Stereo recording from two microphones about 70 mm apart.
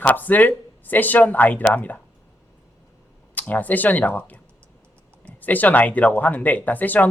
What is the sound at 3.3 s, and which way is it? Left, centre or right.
Speech, left.